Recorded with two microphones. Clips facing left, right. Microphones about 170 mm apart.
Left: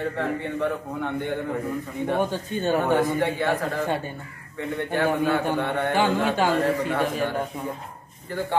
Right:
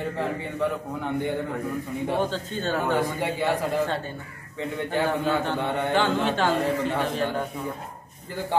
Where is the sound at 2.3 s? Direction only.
15° left (ahead or behind).